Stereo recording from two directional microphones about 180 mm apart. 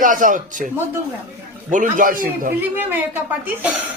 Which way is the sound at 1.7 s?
50° right (ahead or behind).